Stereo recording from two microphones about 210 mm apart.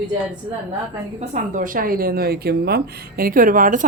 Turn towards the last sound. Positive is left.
turn(degrees=-40)  # may be behind; listen again after turning